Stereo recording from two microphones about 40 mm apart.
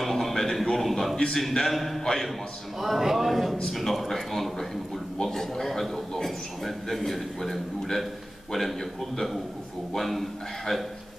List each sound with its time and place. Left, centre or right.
0.0 s a sound: centre
1.3 s a man's voice: centre
2.8 s a man's voice: centre